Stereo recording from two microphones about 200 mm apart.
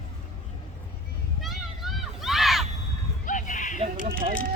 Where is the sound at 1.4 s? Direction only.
Centre (ahead or behind).